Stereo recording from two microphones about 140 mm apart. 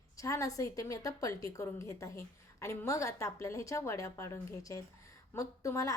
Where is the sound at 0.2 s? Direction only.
25° left (ahead or behind).